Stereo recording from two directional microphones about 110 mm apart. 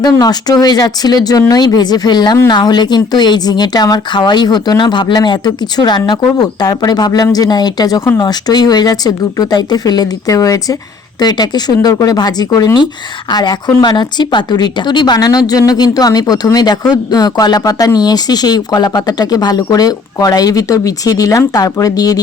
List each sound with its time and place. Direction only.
0.0 s speech: 35° left (ahead or behind)